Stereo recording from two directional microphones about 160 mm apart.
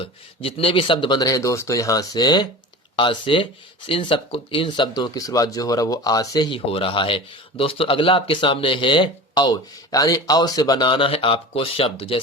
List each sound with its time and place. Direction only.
0.0 s speech: 35° left (ahead or behind)
6.7 s speech: 35° left (ahead or behind)